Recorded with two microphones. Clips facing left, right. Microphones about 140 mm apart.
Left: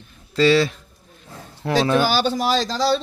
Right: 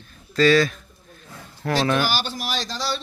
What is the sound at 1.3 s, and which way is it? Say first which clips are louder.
Roaring cats: left 3 dB; 30° left (ahead or behind).